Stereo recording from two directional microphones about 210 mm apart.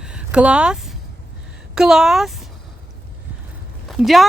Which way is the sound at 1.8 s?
Centre (ahead or behind).